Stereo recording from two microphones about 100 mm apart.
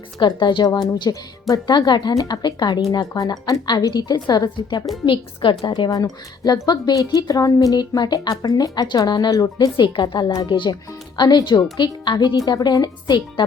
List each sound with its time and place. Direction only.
0.2 s a woman's voice: 50° left (ahead or behind)
5.0 s a woman's voice: 60° left (ahead or behind)
5.9 s a woman's voice: 40° left (ahead or behind)